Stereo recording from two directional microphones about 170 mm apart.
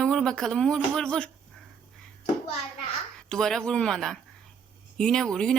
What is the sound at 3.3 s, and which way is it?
Speech, 5° left (ahead or behind).